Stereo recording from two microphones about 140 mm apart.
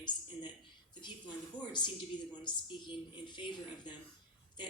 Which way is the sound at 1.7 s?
30° left (ahead or behind).